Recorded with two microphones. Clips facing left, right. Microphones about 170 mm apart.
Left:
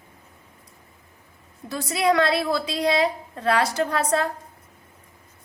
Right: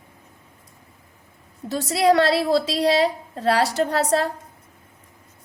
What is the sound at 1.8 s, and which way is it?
A woman's voice, 35° right (ahead or behind).